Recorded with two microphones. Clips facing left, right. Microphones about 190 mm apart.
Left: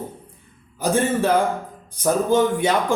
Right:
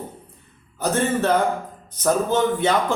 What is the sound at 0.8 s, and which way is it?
Speech, 10° left (ahead or behind).